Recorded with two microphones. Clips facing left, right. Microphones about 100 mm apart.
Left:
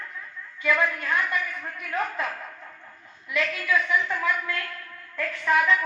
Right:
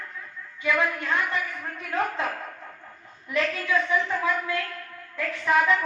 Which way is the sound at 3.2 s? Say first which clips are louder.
Right 1 dB; 35° right (ahead or behind).